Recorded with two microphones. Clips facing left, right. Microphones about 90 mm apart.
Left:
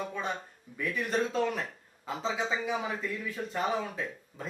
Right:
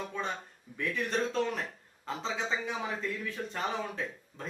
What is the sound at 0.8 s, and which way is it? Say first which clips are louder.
Speech: left 1 dB; 10° left (ahead or behind).